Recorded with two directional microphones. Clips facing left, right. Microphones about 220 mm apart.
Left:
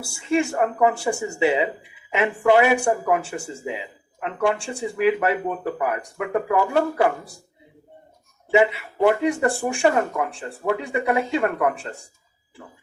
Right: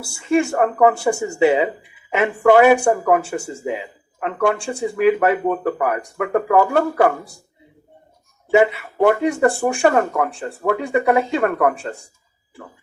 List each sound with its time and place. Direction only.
0.3 s speech: 50° right (ahead or behind)
8.4 s speech: 50° right (ahead or behind)